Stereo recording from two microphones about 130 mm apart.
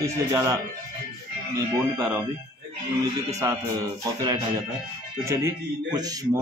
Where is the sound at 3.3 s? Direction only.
25° right (ahead or behind).